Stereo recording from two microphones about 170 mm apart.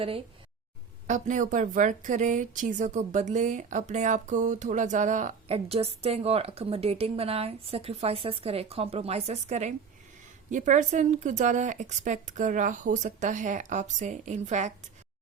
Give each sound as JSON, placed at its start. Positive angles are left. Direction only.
{"t": 1.0, "sound": "a woman's voice", "side_deg": -45}
{"t": 5.5, "sound": "a woman's voice", "side_deg": -35}